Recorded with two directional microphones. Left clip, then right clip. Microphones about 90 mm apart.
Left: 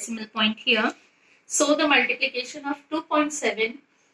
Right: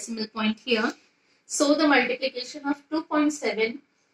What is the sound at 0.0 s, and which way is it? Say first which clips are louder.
Speech: left 4 dB; 55° right (ahead or behind).